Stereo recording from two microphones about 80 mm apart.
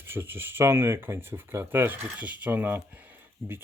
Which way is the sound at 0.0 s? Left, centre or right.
Right.